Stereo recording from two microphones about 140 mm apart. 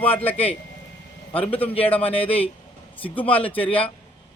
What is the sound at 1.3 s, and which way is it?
Speech, 40° left (ahead or behind).